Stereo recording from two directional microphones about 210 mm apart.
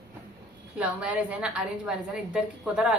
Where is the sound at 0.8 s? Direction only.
5° right (ahead or behind).